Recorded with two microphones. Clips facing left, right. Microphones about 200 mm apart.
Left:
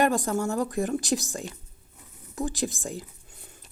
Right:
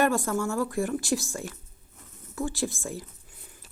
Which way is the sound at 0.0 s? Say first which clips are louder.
Left 1 dB; 15° left (ahead or behind).